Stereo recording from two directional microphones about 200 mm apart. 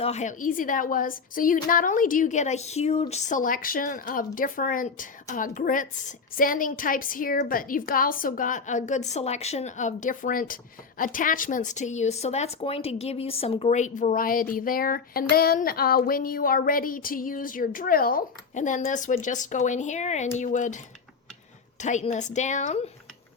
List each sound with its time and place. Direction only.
0.0 s a woman's voice: 35° left (ahead or behind)
21.8 s a woman's voice: 35° left (ahead or behind)